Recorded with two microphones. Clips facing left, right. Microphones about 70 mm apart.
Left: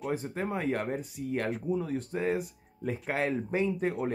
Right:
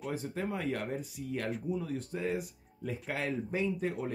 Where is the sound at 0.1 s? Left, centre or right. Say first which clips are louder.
Left 3 dB; left.